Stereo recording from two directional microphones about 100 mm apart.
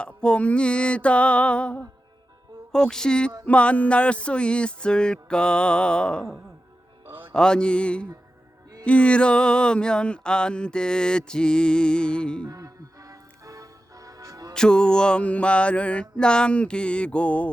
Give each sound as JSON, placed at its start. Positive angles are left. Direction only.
{"t": 0.0, "sound": "music", "side_deg": 10}
{"t": 7.3, "sound": "music", "side_deg": 10}
{"t": 12.5, "sound": "music", "side_deg": -35}
{"t": 14.5, "sound": "music", "side_deg": 5}